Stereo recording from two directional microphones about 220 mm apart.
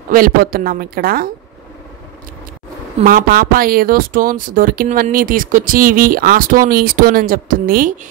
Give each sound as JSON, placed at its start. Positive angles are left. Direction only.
{"t": 0.1, "sound": "speech", "side_deg": -40}
{"t": 3.0, "sound": "speech", "side_deg": -40}